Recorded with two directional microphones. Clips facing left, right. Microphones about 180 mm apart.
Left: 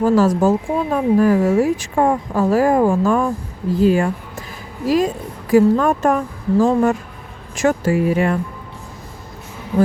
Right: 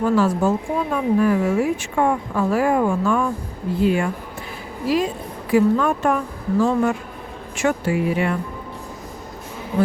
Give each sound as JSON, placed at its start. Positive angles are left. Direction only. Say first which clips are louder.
{"t": 0.0, "sound": "a woman's voice", "louder": "left 4 dB", "side_deg": 40}